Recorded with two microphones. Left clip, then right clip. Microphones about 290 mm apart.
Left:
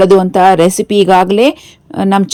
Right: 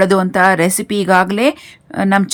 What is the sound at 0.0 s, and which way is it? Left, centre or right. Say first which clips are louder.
A woman's voice: left 5 dB; centre.